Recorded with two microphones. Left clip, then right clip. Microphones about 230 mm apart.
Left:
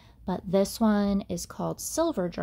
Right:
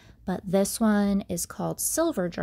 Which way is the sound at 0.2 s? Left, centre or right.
Right.